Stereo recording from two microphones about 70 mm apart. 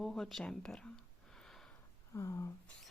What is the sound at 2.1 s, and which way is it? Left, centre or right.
Speech, left.